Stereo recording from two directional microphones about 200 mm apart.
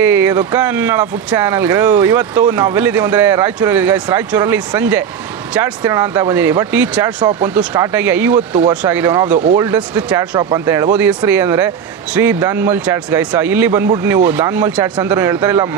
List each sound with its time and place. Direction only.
0.0 s speech: 10° right (ahead or behind)